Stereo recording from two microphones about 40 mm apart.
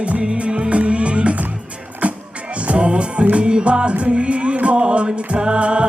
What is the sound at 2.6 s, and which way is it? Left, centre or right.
Music, right.